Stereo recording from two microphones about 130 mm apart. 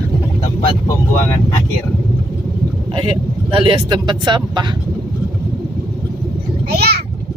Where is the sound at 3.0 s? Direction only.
40° right (ahead or behind).